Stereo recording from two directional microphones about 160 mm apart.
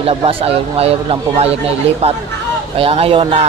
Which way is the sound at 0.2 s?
35° right (ahead or behind).